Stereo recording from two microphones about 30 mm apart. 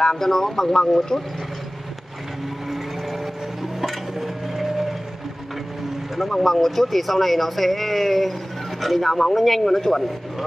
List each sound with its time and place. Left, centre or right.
0.2 s speech: centre
3.8 s a sound: centre
6.1 s speech: centre